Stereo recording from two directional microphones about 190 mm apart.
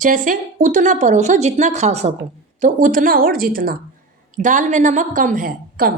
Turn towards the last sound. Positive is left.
turn(degrees=-45)  # may be behind; listen again after turning